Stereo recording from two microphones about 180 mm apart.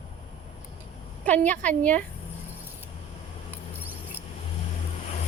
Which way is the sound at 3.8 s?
10° right (ahead or behind).